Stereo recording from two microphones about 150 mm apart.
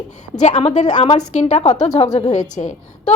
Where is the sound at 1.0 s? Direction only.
35° left (ahead or behind).